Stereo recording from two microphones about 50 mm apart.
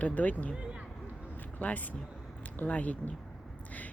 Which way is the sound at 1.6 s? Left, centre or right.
Left.